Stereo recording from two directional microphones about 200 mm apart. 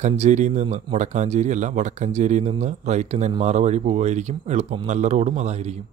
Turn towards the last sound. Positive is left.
turn(degrees=-35)  # may be behind; listen again after turning